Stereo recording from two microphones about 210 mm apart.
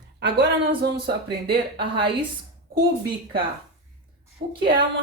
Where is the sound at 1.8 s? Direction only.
25° right (ahead or behind).